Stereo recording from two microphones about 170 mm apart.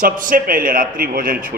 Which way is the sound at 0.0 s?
55° right (ahead or behind).